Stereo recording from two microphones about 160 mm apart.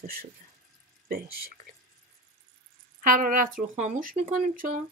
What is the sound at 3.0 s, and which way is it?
Speech, 55° right (ahead or behind).